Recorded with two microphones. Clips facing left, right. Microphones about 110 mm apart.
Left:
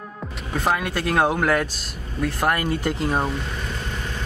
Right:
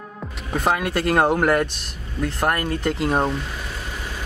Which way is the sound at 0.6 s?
Centre (ahead or behind).